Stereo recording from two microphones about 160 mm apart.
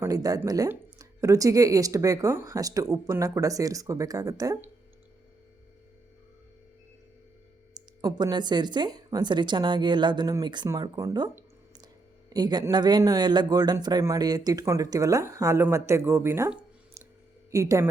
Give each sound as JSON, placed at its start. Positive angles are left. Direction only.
{"t": 0.0, "sound": "speech", "side_deg": -20}
{"t": 7.7, "sound": "speech", "side_deg": -25}
{"t": 12.3, "sound": "speech", "side_deg": -25}
{"t": 17.5, "sound": "speech", "side_deg": -20}